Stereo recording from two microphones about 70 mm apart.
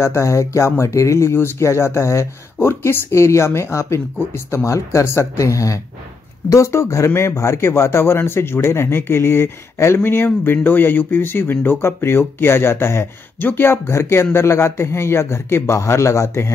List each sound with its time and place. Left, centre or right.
0.0 s speech: left